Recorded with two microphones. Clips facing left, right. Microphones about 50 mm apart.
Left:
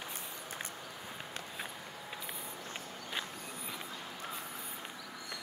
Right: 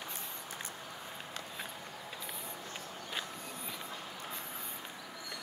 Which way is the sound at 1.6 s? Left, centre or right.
Centre.